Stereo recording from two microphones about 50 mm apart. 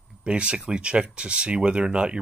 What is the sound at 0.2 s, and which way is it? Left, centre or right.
Speech, centre.